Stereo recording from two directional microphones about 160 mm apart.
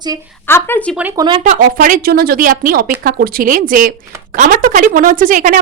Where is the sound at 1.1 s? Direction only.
25° right (ahead or behind).